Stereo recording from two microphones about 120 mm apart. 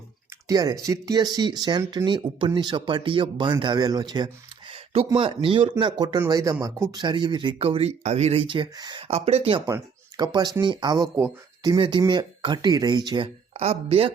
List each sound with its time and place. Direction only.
0.4 s speech: 30° right (ahead or behind)
5.1 s speech: 45° right (ahead or behind)
6.1 s speech: 30° right (ahead or behind)
9.0 s speech: 60° right (ahead or behind)
10.2 s speech: 35° right (ahead or behind)
13.5 s speech: 60° right (ahead or behind)